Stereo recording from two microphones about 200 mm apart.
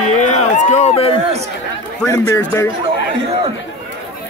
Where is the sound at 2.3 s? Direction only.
15° left (ahead or behind).